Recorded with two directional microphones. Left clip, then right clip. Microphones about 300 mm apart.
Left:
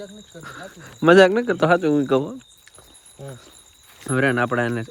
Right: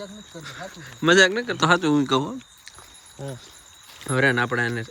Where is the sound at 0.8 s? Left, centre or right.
Centre.